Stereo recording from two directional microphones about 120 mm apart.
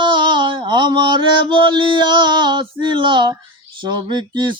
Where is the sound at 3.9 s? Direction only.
40° right (ahead or behind).